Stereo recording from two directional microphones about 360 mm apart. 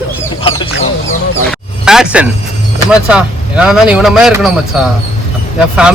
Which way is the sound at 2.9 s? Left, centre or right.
Centre.